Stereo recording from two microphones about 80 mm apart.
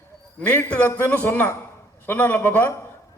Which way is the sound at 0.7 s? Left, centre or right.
Left.